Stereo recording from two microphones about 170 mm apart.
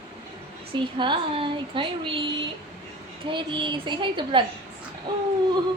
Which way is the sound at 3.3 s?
30° right (ahead or behind).